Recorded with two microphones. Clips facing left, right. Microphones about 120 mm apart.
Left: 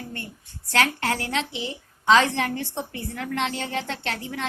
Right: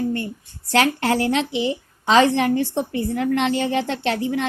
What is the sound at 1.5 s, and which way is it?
Speech, 65° right (ahead or behind).